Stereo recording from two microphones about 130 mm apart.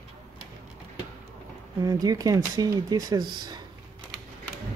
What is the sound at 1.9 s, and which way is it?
Speech, 25° right (ahead or behind).